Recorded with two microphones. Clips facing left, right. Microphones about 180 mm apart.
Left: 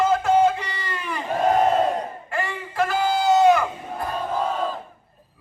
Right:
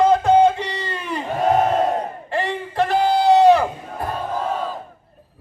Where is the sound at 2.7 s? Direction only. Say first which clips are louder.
Right 4 dB; 35° right (ahead or behind).